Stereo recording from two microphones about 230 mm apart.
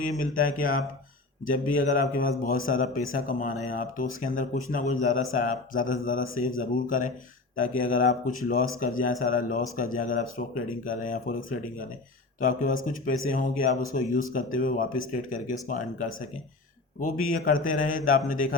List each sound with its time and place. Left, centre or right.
0.0 s speech: left